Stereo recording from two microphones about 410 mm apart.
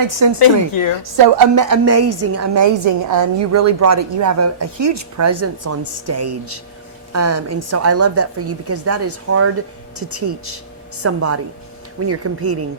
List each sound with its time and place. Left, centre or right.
0.1 s a woman's voice: right
2.4 s a woman's voice: right